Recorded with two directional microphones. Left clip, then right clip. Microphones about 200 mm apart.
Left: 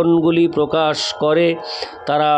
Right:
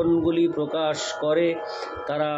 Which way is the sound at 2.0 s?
55° left (ahead or behind).